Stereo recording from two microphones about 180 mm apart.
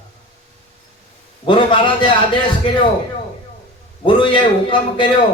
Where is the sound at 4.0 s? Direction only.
30° left (ahead or behind).